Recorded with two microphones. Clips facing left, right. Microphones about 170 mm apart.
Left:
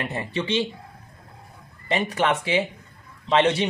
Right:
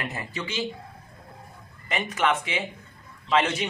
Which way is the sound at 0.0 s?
30° left (ahead or behind).